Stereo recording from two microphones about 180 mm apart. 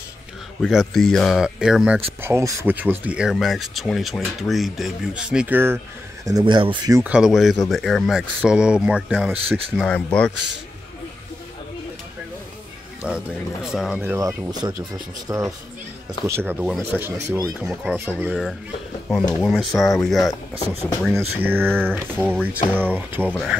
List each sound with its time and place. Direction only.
0.6 s speech: centre (ahead or behind)
2.2 s speech: 15° right (ahead or behind)
6.2 s speech: 25° right (ahead or behind)
7.0 s speech: 5° right (ahead or behind)
9.8 s speech: 5° left (ahead or behind)
13.0 s speech: 5° right (ahead or behind)
21.1 s speech: 10° right (ahead or behind)